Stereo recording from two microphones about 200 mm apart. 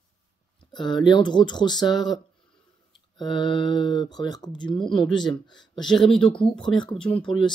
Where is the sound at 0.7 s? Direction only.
20° left (ahead or behind).